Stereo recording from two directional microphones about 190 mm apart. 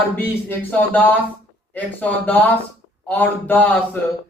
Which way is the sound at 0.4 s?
10° left (ahead or behind).